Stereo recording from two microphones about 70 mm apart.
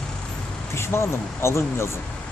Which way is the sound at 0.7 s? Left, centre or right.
Left.